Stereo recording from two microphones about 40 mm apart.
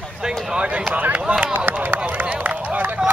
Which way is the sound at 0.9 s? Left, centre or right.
Right.